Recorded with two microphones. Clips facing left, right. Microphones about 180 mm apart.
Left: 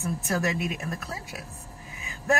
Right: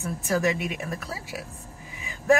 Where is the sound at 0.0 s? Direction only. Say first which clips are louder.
Right 3 dB; centre (ahead or behind).